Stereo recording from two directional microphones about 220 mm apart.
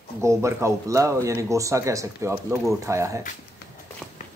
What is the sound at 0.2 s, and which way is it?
Speech, 15° right (ahead or behind).